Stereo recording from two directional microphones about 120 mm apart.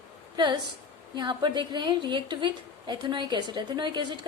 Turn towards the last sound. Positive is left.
turn(degrees=-40)  # may be behind; listen again after turning